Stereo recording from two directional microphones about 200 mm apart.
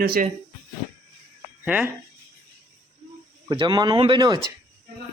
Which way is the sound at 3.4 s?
20° right (ahead or behind).